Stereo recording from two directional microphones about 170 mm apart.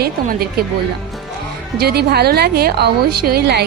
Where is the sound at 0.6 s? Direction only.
65° right (ahead or behind).